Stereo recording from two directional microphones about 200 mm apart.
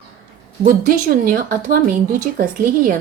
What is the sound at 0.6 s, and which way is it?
Speech, 45° right (ahead or behind).